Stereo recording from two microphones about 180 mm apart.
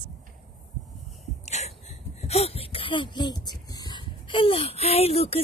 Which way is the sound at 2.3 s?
35° left (ahead or behind).